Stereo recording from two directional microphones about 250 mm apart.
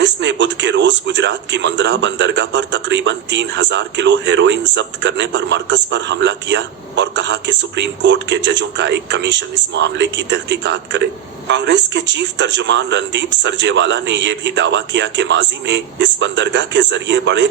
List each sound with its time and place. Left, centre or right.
0.0 s a man's voice: right